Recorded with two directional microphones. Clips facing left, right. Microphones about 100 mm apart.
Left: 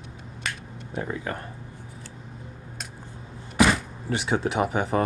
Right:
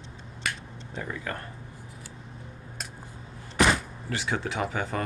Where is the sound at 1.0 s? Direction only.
20° left (ahead or behind).